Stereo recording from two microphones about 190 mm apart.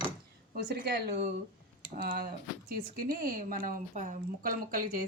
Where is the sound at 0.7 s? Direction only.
60° right (ahead or behind).